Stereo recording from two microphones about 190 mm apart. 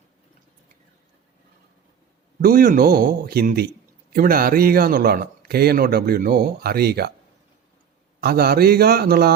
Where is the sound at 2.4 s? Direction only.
50° right (ahead or behind).